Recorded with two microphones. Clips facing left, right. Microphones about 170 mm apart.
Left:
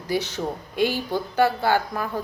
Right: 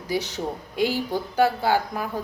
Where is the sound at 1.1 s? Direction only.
10° right (ahead or behind).